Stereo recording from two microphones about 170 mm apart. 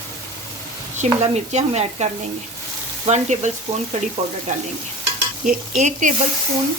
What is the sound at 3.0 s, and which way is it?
Frying, 45° right (ahead or behind).